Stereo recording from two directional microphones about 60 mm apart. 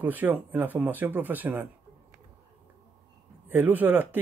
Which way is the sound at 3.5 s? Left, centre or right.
Right.